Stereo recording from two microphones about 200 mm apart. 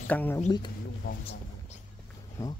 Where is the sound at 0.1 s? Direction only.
10° left (ahead or behind).